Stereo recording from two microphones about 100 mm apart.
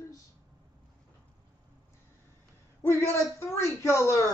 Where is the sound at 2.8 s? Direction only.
25° left (ahead or behind).